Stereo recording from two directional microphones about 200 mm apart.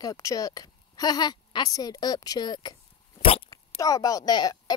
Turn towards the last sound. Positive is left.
turn(degrees=20)  # may be behind; listen again after turning